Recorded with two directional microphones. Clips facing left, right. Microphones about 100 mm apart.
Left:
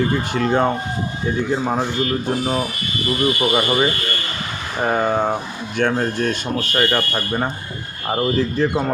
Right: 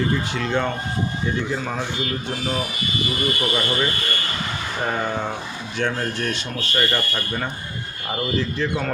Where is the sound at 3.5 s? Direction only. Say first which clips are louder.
Left 5 dB; 55° left (ahead or behind).